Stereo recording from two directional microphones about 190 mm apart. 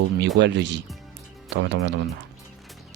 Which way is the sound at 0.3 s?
70° right (ahead or behind).